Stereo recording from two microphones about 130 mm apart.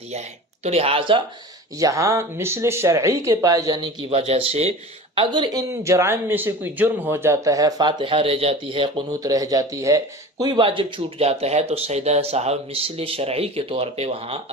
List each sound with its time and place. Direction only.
0.7 s speech: 45° right (ahead or behind)
1.8 s speech: 25° right (ahead or behind)
4.1 s speech: 50° right (ahead or behind)
9.2 s speech: 25° right (ahead or behind); by 14.4 s 45° right (ahead or behind)